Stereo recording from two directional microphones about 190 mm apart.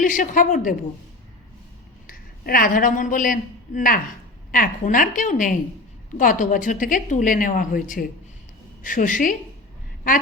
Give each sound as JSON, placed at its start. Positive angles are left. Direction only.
{"t": 0.0, "sound": "speech", "side_deg": 45}
{"t": 2.0, "sound": "speech", "side_deg": 50}